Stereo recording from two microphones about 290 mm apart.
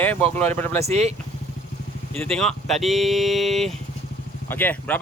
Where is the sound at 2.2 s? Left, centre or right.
Centre.